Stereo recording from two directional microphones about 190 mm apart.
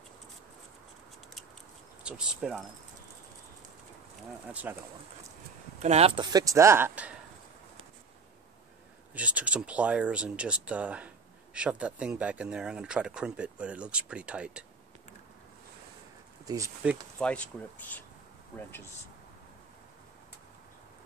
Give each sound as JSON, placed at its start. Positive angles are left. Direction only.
{"t": 2.0, "sound": "speech", "side_deg": -5}
{"t": 4.5, "sound": "speech", "side_deg": -10}
{"t": 5.8, "sound": "speech", "side_deg": -35}
{"t": 9.1, "sound": "speech", "side_deg": -5}
{"t": 16.4, "sound": "speech", "side_deg": -15}
{"t": 17.2, "sound": "speech", "side_deg": 5}